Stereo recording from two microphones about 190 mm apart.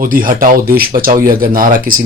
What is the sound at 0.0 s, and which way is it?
Speech, 45° right (ahead or behind).